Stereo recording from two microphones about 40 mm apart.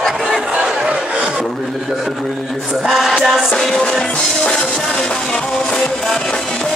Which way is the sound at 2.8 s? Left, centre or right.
Centre.